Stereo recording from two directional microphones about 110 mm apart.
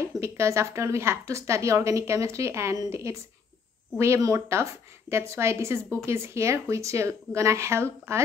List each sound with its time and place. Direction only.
0.2 s a woman's voice: 25° right (ahead or behind)